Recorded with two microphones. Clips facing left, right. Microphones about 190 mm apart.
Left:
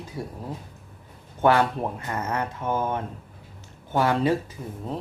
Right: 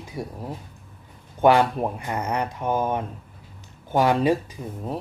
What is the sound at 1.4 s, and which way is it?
Speech, 15° right (ahead or behind).